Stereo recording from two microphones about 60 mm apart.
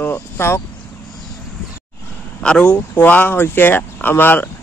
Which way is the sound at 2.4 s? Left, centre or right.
Centre.